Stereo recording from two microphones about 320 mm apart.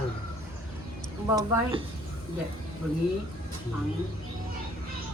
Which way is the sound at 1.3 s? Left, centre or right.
Centre.